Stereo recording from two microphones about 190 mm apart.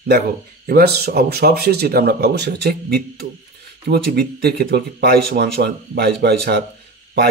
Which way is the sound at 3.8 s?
60° right (ahead or behind).